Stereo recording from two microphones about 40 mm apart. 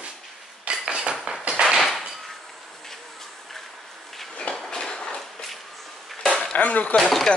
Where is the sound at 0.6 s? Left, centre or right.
Right.